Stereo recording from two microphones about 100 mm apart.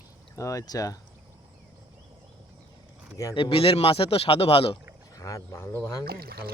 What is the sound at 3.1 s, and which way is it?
Speech, 35° left (ahead or behind).